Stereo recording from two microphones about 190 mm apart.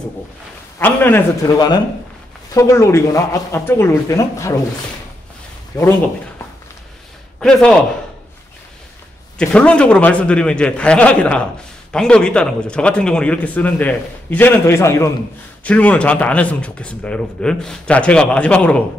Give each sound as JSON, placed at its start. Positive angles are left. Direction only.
{"t": 0.7, "sound": "a man's voice", "side_deg": 10}
{"t": 7.3, "sound": "speech", "side_deg": 5}
{"t": 9.4, "sound": "a man's voice", "side_deg": 5}